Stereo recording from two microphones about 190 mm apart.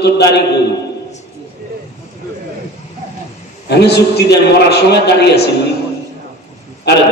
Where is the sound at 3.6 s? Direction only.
60° left (ahead or behind).